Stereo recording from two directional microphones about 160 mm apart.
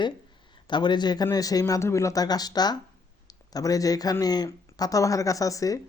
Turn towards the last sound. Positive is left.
turn(degrees=20)  # may be behind; listen again after turning